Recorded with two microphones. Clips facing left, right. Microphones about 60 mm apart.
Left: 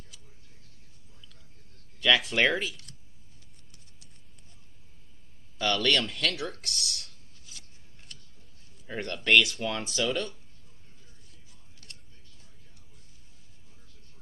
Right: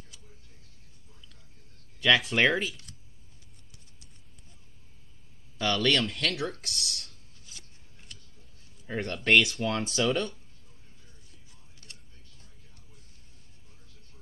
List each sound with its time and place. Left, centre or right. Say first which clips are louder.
2.0 s a sound: right 1 dB; centre
2.2 s speech: right 1 dB; centre
5.6 s speech: even; centre
8.8 s speech: right 1 dB; centre
9.9 s speech: right 2 dB; right